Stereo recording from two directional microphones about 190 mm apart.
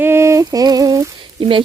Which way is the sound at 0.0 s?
15° right (ahead or behind).